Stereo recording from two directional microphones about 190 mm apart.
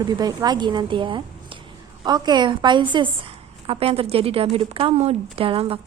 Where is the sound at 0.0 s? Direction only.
20° right (ahead or behind).